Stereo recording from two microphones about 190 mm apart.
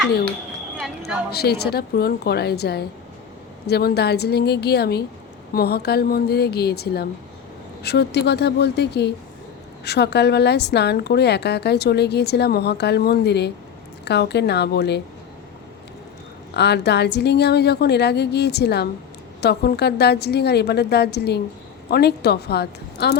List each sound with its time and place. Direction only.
1.3 s a woman's voice: 55° left (ahead or behind)
16.6 s a woman's voice: 60° left (ahead or behind)